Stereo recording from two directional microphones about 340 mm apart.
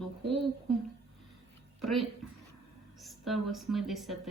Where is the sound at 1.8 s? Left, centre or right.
Centre.